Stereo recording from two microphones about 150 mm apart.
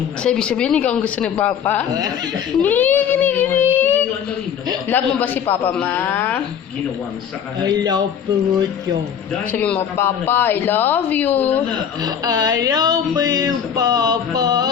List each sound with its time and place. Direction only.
0.2 s speech: 5° left (ahead or behind)
3.8 s a sound: 15° left (ahead or behind)
4.9 s speech: 10° left (ahead or behind)
7.6 s speech: 25° right (ahead or behind)
9.5 s speech: 10° left (ahead or behind)
12.0 s speech: 25° right (ahead or behind)